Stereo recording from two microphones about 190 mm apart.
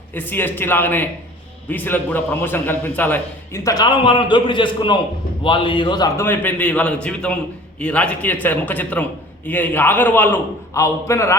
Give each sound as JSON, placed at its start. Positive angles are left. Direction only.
{"t": 0.1, "sound": "a man's voice", "side_deg": 10}
{"t": 6.2, "sound": "a man's voice", "side_deg": 10}